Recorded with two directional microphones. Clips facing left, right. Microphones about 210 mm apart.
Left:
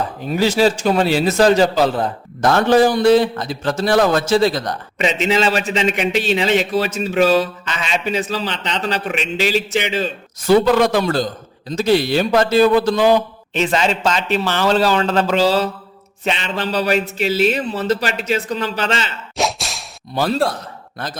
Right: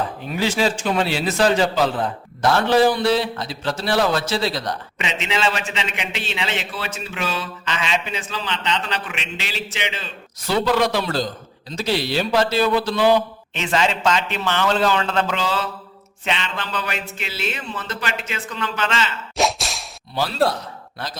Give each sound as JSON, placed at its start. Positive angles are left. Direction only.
{"t": 0.3, "sound": "a man's voice", "side_deg": 40}
{"t": 19.4, "sound": "whip", "side_deg": 0}